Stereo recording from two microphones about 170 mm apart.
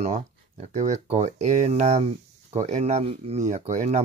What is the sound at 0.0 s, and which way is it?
Speech, 40° right (ahead or behind).